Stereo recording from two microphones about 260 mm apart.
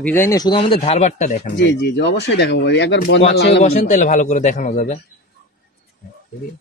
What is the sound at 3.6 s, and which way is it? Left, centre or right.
A man's voice, left.